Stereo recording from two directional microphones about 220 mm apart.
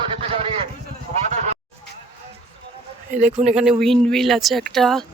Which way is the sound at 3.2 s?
30° right (ahead or behind).